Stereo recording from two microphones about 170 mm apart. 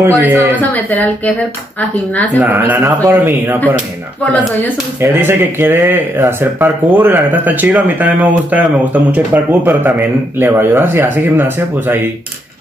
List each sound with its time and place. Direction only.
0.0 s speech: 15° right (ahead or behind)
0.6 s speech: 10° left (ahead or behind)
2.3 s speech: 15° right (ahead or behind)
5.0 s speech: 15° right (ahead or behind)